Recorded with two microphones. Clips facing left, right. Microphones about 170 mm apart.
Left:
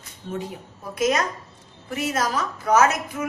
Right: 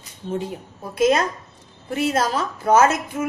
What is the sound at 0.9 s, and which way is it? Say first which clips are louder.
A woman's voice: right 4 dB; 30° right (ahead or behind).